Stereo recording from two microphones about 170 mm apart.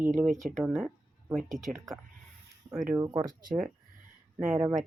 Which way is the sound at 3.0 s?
25° right (ahead or behind).